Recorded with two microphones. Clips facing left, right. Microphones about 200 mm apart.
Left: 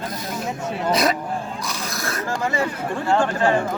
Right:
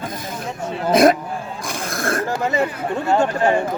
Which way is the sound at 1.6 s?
50° right (ahead or behind).